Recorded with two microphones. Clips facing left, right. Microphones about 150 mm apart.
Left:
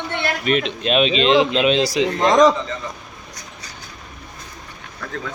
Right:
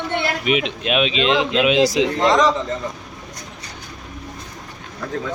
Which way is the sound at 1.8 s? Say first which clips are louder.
Right 3 dB; 20° right (ahead or behind).